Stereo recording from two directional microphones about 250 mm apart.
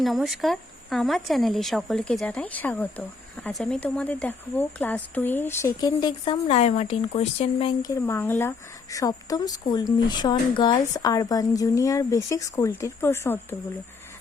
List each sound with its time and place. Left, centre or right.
0.0 s speech: centre